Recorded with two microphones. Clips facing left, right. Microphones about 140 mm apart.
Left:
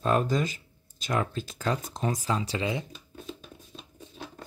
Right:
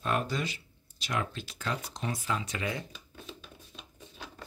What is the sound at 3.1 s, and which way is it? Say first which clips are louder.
Music: left 8 dB; 40° left (ahead or behind).